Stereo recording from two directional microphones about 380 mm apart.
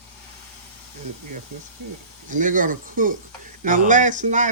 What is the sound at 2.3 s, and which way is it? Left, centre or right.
Speech, centre.